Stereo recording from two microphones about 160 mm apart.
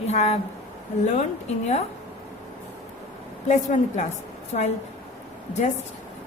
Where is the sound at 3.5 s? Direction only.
50° left (ahead or behind).